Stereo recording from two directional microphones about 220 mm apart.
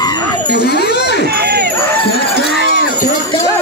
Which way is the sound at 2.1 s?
50° left (ahead or behind).